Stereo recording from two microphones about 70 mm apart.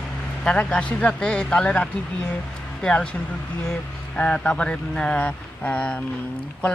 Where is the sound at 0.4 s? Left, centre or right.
Centre.